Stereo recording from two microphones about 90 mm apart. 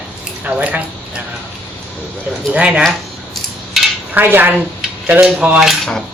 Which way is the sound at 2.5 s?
15° right (ahead or behind).